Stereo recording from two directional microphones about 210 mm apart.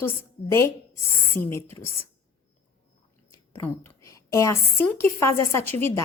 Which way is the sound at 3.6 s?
15° left (ahead or behind).